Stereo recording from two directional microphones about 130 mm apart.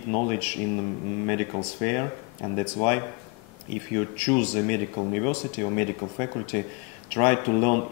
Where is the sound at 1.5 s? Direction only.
25° left (ahead or behind).